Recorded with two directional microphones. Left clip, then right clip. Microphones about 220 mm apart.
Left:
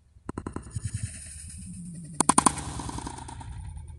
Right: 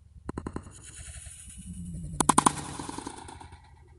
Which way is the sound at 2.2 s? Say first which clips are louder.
Even; 10° left (ahead or behind).